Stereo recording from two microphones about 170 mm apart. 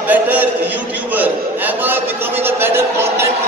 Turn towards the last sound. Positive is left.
turn(degrees=-15)  # may be behind; listen again after turning